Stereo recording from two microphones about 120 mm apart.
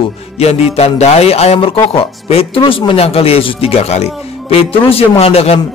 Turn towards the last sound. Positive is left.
turn(degrees=55)  # may be behind; listen again after turning